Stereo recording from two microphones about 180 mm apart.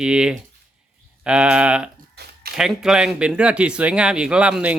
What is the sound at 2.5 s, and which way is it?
Speech, 5° right (ahead or behind).